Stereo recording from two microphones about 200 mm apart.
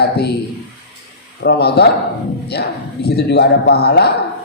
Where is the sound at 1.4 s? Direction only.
55° left (ahead or behind).